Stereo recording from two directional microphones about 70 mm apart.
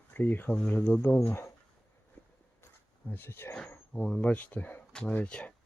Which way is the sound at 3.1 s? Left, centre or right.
Left.